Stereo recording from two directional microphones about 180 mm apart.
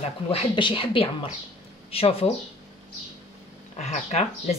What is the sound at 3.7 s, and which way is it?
Speech, 40° left (ahead or behind).